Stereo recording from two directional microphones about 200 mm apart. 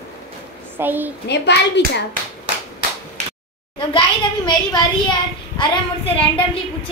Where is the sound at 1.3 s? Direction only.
60° left (ahead or behind).